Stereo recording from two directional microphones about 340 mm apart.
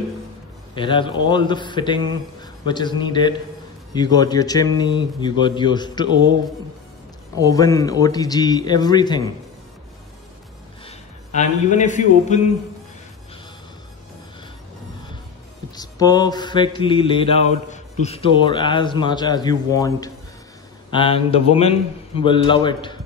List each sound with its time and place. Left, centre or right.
0.7 s mantra: centre
7.3 s mantra: centre
10.9 s a man's voice: left
15.7 s mantra: centre